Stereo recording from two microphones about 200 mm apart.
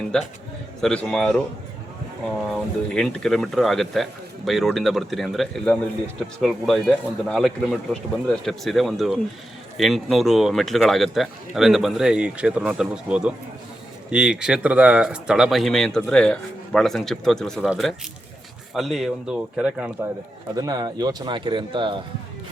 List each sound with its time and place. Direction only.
0.1 s speech: 5° left (ahead or behind)
2.5 s speech: 5° left (ahead or behind)
20.6 s speech: 20° right (ahead or behind)